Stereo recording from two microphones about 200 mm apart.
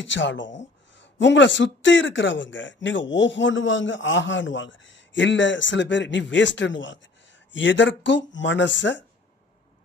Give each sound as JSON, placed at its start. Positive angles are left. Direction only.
{"t": 0.0, "sound": "a man's voice", "side_deg": 65}